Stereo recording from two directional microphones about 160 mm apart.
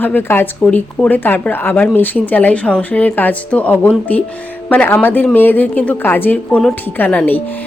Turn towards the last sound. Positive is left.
turn(degrees=10)  # may be behind; listen again after turning